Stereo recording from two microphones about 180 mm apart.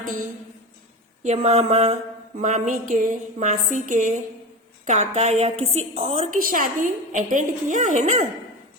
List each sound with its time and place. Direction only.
1.2 s mantra: 35° right (ahead or behind)
2.4 s a woman's voice: 45° right (ahead or behind)
4.9 s mantra: 40° right (ahead or behind)
5.9 s a woman's voice: 35° right (ahead or behind)